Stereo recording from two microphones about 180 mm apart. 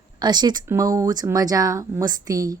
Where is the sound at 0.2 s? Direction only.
25° right (ahead or behind).